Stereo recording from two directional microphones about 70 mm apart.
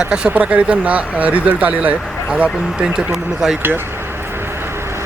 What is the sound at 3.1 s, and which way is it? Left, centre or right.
Speech, centre.